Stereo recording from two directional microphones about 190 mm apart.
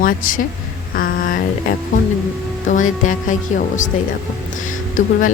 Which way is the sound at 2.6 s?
45° left (ahead or behind).